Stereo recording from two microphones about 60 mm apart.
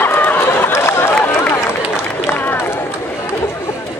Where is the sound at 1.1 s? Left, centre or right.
Left.